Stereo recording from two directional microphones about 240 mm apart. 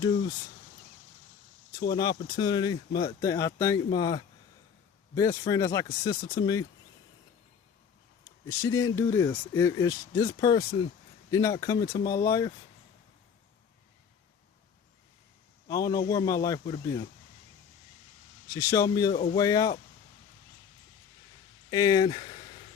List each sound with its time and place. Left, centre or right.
0.0 s speech: centre
1.9 s speech: centre
8.4 s speech: centre
15.6 s speech: centre
18.5 s speech: centre
21.7 s speech: centre